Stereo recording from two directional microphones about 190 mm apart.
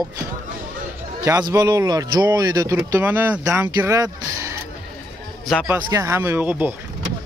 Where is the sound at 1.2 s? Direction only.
20° right (ahead or behind).